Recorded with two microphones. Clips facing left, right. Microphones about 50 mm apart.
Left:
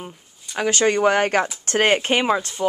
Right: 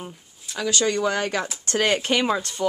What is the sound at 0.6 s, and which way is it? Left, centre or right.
Speech, left.